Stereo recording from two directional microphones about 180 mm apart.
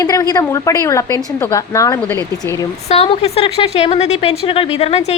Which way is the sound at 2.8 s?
35° left (ahead or behind).